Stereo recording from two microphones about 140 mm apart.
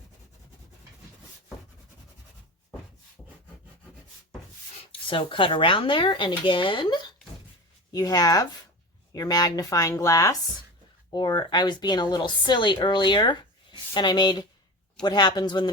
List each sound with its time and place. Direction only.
4.9 s a woman's voice: 40° left (ahead or behind)